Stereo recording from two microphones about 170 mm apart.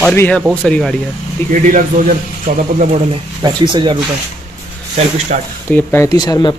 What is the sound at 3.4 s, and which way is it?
Speech, 25° right (ahead or behind).